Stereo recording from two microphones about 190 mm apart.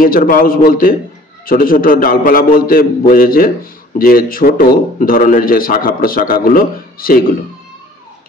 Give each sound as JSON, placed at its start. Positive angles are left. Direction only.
{"t": 0.0, "sound": "a man's voice", "side_deg": 45}